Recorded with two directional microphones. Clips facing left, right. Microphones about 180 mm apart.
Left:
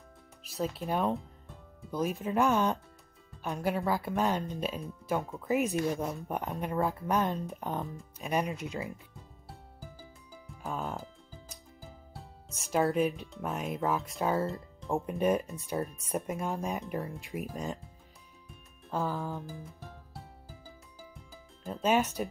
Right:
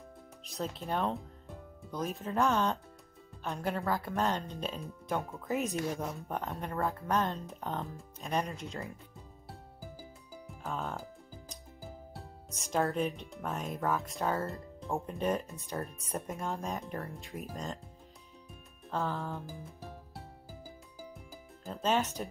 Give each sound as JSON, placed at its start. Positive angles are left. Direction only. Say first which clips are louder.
{"t": 0.5, "sound": "speech", "louder": "left 3 dB", "side_deg": 5}
{"t": 10.6, "sound": "speech", "louder": "left 2 dB", "side_deg": 0}
{"t": 12.6, "sound": "speech", "louder": "left 3 dB", "side_deg": 5}
{"t": 15.0, "sound": "speech", "louder": "left 5 dB", "side_deg": 15}
{"t": 15.8, "sound": "speech", "louder": "left 4 dB", "side_deg": 5}
{"t": 17.0, "sound": "speech", "louder": "left 4 dB", "side_deg": 15}
{"t": 18.9, "sound": "speech", "louder": "left 2 dB", "side_deg": 0}
{"t": 21.6, "sound": "speech", "louder": "left 3 dB", "side_deg": 10}